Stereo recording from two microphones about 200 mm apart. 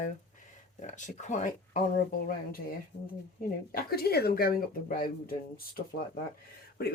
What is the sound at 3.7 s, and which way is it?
Speech, 50° left (ahead or behind).